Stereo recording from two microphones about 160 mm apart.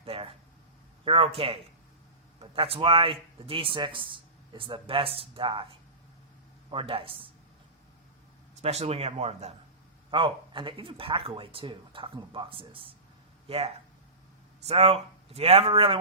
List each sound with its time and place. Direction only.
0.0 s speech: 35° right (ahead or behind)
6.7 s speech: 35° right (ahead or behind)
8.6 s speech: 40° right (ahead or behind)
14.7 s speech: 40° right (ahead or behind)